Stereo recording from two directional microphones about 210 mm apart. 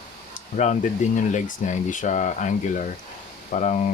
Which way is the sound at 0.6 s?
35° left (ahead or behind).